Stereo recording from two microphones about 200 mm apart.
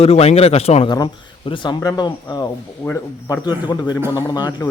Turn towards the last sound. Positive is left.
turn(degrees=20)  # may be behind; listen again after turning